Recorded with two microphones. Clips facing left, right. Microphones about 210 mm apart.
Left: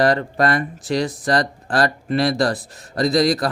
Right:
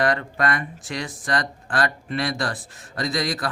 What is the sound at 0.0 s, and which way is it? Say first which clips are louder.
Speech: left 5 dB; 35° left (ahead or behind).